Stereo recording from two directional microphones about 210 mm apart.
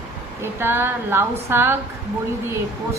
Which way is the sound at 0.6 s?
10° right (ahead or behind).